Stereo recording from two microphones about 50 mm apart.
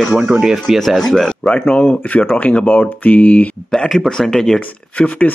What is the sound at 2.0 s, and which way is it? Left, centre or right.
Speech, left.